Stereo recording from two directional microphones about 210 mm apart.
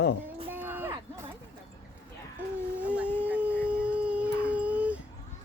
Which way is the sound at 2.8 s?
5° right (ahead or behind).